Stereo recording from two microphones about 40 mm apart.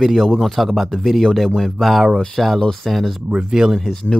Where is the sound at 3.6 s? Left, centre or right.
Centre.